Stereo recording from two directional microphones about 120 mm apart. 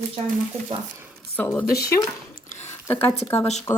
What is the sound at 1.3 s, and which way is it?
Speech, 15° left (ahead or behind).